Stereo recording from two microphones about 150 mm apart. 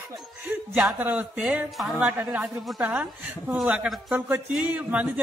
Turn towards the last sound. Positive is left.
turn(degrees=-10)  # may be behind; listen again after turning